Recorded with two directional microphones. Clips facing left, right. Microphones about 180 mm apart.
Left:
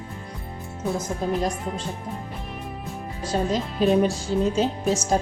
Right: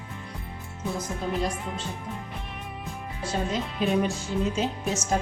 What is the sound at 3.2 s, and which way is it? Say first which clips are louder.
A woman's voice: left 4 dB; 35° left (ahead or behind).